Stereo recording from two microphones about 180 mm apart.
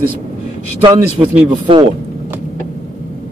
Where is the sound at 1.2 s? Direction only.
15° right (ahead or behind).